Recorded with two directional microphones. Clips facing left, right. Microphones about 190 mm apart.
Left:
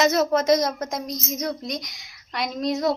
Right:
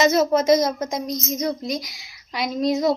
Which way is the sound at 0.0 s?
Centre (ahead or behind).